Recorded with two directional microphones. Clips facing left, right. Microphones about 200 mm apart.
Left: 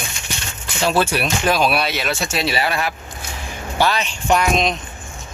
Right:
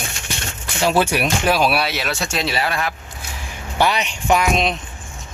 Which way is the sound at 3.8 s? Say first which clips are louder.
Even; 15° right (ahead or behind).